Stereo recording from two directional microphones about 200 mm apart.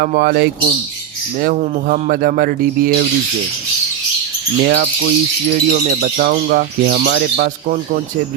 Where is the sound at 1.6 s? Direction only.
35° right (ahead or behind).